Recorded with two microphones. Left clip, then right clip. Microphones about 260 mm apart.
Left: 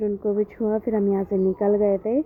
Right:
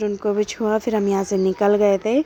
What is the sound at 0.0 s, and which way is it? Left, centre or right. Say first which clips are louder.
Speech: right 2 dB; right.